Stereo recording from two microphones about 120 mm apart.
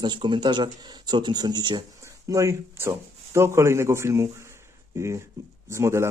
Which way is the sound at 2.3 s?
25° right (ahead or behind).